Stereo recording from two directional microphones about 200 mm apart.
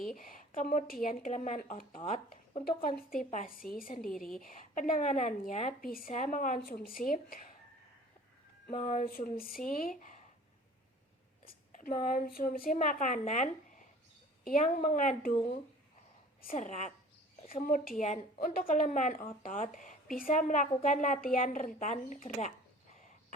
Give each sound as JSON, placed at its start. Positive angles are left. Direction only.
{"t": 0.2, "sound": "a woman's voice", "side_deg": 45}
{"t": 2.6, "sound": "speech", "side_deg": 50}
{"t": 8.7, "sound": "speech", "side_deg": 35}
{"t": 11.4, "sound": "a woman's voice", "side_deg": 40}
{"t": 16.4, "sound": "speech", "side_deg": 40}